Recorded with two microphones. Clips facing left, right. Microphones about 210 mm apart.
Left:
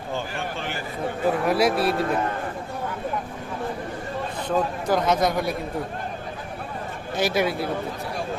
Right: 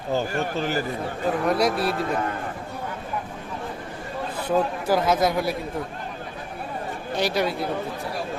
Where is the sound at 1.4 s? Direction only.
5° left (ahead or behind).